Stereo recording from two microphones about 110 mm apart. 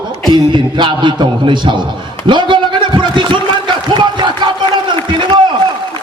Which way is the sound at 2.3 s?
45° right (ahead or behind).